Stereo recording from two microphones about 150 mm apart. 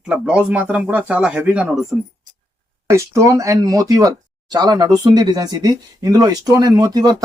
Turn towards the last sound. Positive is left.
turn(degrees=-25)  # may be behind; listen again after turning